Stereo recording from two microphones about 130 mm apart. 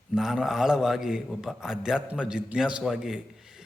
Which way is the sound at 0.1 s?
5° right (ahead or behind).